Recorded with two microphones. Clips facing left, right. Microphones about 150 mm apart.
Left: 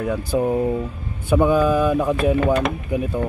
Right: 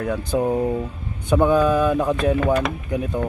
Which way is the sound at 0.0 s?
10° left (ahead or behind).